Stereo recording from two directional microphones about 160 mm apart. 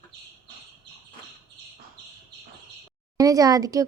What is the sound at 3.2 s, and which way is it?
Speech, 20° right (ahead or behind).